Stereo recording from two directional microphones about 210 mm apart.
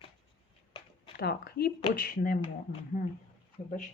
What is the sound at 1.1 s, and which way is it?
Speech, 50° left (ahead or behind).